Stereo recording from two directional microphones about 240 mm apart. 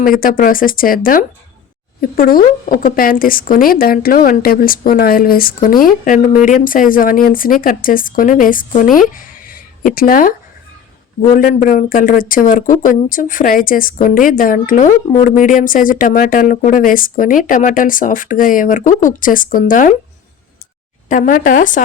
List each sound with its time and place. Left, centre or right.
0.0 s speech: left
21.1 s speech: left